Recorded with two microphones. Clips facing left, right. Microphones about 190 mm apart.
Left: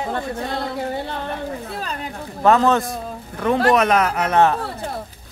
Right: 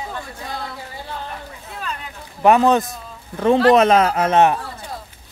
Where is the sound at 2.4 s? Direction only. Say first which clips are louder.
Right 2 dB; 15° right (ahead or behind).